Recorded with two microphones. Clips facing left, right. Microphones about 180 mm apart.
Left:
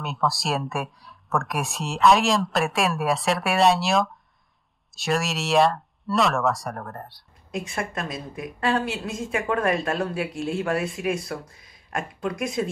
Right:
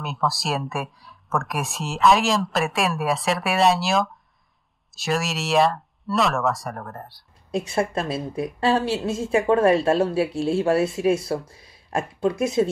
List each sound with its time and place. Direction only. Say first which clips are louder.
0.0 s speech: even; centre (ahead or behind)
7.5 s a woman's voice: right 6 dB; 30° right (ahead or behind)